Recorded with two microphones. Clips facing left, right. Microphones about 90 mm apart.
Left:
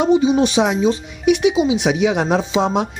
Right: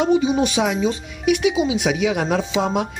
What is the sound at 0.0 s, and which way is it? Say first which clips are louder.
Speech: left 3 dB; 20° left (ahead or behind).